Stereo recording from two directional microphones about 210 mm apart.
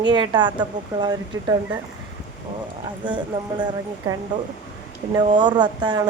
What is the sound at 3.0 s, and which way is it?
Speech, 20° right (ahead or behind).